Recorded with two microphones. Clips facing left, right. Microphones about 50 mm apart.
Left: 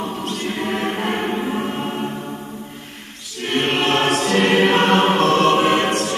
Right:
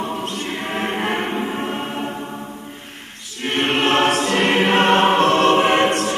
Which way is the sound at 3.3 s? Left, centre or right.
Right.